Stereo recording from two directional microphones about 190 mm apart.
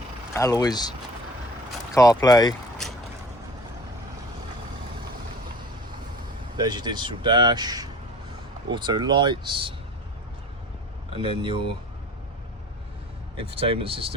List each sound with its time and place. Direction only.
0.3 s speech: 20° left (ahead or behind)
6.6 s speech: 20° right (ahead or behind)
11.1 s speech: 25° right (ahead or behind)
13.3 s speech: 30° right (ahead or behind)